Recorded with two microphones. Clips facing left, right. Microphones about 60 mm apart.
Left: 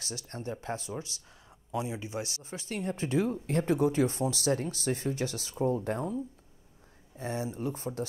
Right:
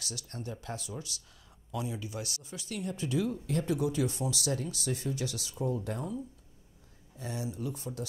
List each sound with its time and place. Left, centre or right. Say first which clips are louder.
0.0 s speech: left 3 dB; left